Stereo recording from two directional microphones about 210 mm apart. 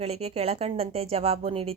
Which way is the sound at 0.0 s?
30° right (ahead or behind).